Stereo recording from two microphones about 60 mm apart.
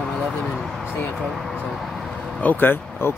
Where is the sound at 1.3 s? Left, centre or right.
Centre.